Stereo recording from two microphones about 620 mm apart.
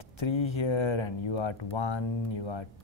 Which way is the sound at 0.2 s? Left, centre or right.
Left.